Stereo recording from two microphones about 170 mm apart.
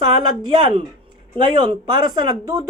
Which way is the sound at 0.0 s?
25° right (ahead or behind).